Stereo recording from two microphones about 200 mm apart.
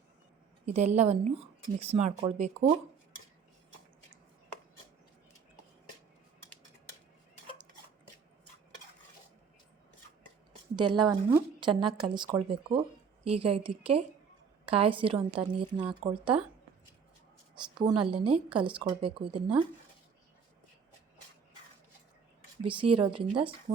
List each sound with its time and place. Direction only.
0.6 s speech: 35° right (ahead or behind)
10.8 s a woman's voice: 20° right (ahead or behind)
17.5 s a woman's voice: 25° right (ahead or behind)
22.6 s a woman's voice: 25° right (ahead or behind)